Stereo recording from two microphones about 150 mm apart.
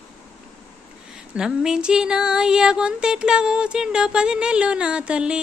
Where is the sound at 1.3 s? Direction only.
5° right (ahead or behind).